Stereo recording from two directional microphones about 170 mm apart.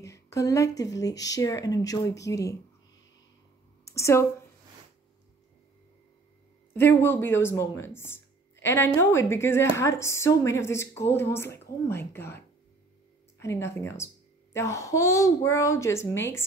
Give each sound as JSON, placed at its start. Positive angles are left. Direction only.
{"t": 0.0, "sound": "speech", "side_deg": 20}
{"t": 3.8, "sound": "a woman's voice", "side_deg": 15}
{"t": 6.7, "sound": "speech", "side_deg": 10}